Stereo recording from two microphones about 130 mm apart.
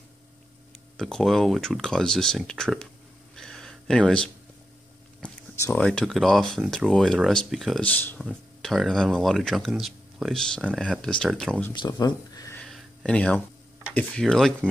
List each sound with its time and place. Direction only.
0.9 s speech: centre (ahead or behind)
3.3 s a sound: 5° left (ahead or behind)
5.7 s speech: 10° left (ahead or behind)
7.8 s speech: 15° left (ahead or behind)
8.2 s speech: centre (ahead or behind)
11.7 s speech: 35° left (ahead or behind)
12.5 s a sound: 5° left (ahead or behind)
13.9 s speech: 5° left (ahead or behind)